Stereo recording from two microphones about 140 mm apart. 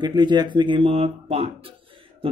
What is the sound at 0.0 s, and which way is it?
Speech, 30° right (ahead or behind).